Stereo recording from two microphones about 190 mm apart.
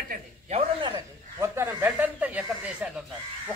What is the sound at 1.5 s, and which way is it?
Speech, 10° right (ahead or behind).